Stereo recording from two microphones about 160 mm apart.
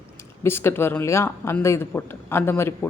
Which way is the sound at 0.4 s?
15° left (ahead or behind).